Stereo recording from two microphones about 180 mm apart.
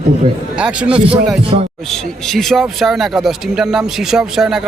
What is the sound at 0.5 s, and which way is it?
Speech, 5° right (ahead or behind).